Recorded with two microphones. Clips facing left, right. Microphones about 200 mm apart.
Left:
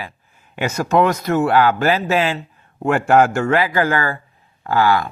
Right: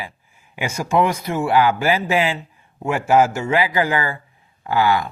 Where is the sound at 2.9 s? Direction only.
5° right (ahead or behind).